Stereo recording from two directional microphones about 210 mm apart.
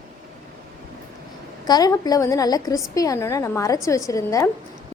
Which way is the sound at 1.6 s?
20° left (ahead or behind).